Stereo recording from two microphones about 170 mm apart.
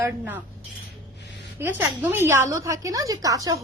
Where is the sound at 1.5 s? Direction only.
10° right (ahead or behind).